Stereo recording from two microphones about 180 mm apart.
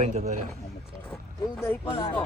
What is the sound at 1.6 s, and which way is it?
Speech, 10° left (ahead or behind).